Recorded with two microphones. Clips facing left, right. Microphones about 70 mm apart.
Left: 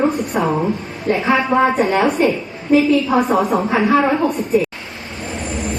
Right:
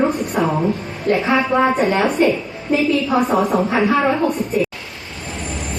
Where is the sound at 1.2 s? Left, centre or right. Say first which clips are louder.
Left 3 dB; centre.